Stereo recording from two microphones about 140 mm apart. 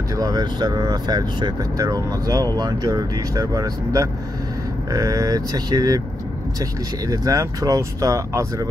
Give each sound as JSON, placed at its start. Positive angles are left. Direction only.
{"t": 0.1, "sound": "speech", "side_deg": -25}